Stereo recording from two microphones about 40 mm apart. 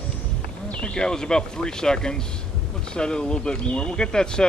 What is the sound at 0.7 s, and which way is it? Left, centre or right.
Speech, left.